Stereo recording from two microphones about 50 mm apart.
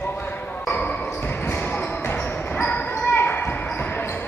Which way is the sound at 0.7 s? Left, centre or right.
Left.